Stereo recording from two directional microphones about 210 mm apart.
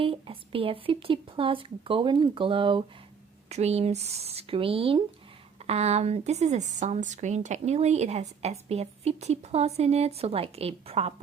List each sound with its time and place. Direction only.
0.0 s speech: 25° right (ahead or behind)